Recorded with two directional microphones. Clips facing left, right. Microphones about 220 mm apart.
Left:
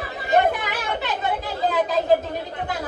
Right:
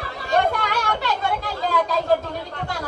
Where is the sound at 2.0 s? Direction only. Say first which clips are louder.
Left 2 dB; 20° left (ahead or behind).